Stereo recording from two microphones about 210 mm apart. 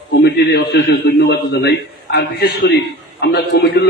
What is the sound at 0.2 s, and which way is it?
A man's voice, 50° left (ahead or behind).